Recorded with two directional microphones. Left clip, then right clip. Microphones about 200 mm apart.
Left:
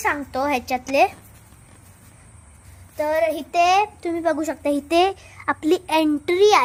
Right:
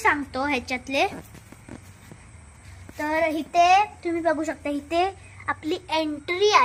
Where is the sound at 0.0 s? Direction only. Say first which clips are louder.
Left 1 dB; 60° left (ahead or behind).